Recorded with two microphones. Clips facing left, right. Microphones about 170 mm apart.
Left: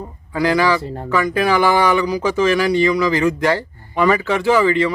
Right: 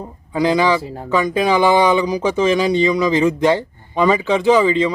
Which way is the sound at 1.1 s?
20° right (ahead or behind).